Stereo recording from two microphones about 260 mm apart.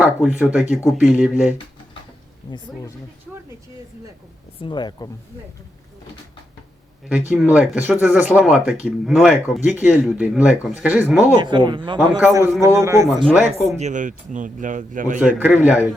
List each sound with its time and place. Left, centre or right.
0.0 s speech: centre
2.4 s speech: centre
4.6 s speech: centre
7.1 s speech: centre
11.3 s a man's voice: centre
13.2 s speech: centre
13.7 s a man's voice: right
15.4 s a man's voice: centre